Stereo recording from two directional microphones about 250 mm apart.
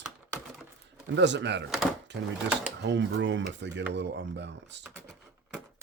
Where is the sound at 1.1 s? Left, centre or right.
Right.